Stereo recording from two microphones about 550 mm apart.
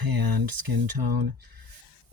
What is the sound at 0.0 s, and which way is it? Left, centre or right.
Speech, right.